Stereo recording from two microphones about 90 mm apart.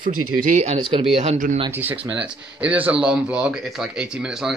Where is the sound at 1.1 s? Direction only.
90° right.